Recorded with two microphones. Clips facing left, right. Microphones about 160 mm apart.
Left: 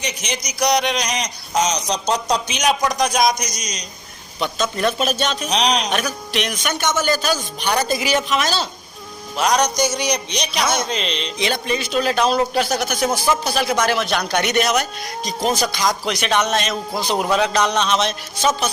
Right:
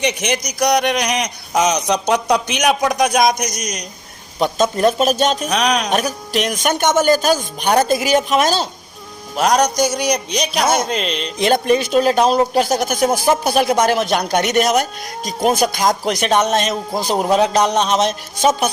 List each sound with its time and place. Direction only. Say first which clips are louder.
0.0 s speech: right 7 dB; 60° right (ahead or behind)
4.4 s a man's voice: right 6 dB; 45° right (ahead or behind)
5.9 s a man's voice: right 4 dB; 40° right (ahead or behind)
10.2 s a man's voice: right 5 dB; 5° right (ahead or behind)
10.5 s a man's voice: right 4 dB; 50° right (ahead or behind)
11.0 s music: right 3 dB; 5° right (ahead or behind)
11.3 s a man's voice: right 9 dB; 50° right (ahead or behind)
15.2 s music: right 2 dB; 5° right (ahead or behind)
15.4 s a man's voice: right 5 dB; 55° right (ahead or behind)